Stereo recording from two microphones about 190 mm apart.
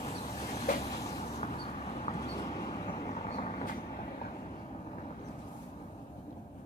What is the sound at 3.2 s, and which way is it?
Vehicle, 40° left (ahead or behind).